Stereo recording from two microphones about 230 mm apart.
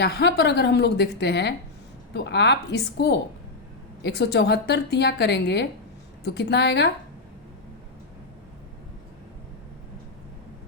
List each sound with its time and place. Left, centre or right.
0.0 s a woman's voice: left